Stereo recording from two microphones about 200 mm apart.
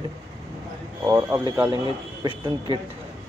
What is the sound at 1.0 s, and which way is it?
Speech, 15° right (ahead or behind).